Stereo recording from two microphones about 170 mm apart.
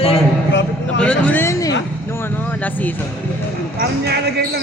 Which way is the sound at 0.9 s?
10° left (ahead or behind).